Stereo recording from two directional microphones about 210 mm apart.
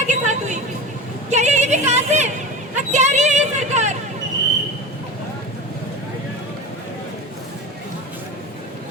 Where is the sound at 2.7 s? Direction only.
35° right (ahead or behind).